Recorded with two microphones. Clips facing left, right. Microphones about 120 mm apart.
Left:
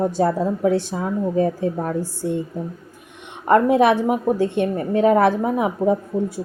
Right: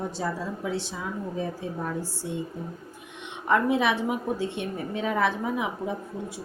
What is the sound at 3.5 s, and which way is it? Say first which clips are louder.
A woman's voice: left 8 dB; 50° left (ahead or behind).